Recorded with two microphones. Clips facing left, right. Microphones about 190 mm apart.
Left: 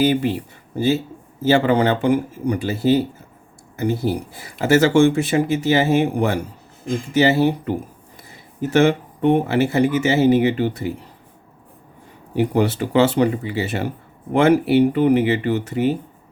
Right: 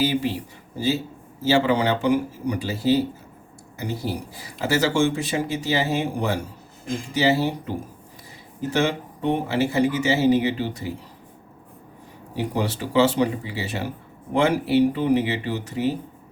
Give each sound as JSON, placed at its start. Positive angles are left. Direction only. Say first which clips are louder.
{"t": 0.0, "sound": "speech", "louder": "left 5 dB", "side_deg": 55}
{"t": 8.7, "sound": "speech", "louder": "left 7 dB", "side_deg": 55}
{"t": 12.3, "sound": "speech", "louder": "left 7 dB", "side_deg": 60}